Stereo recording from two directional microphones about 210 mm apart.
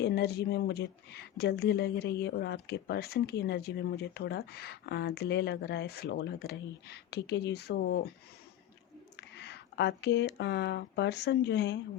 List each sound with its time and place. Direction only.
0.0 s a woman's voice: 50° left (ahead or behind)
9.3 s speech: 50° left (ahead or behind)